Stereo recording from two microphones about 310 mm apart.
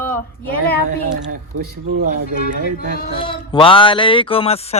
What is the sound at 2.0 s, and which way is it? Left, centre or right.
Speech, right.